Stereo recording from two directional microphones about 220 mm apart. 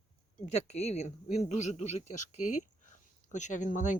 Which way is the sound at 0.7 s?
30° left (ahead or behind).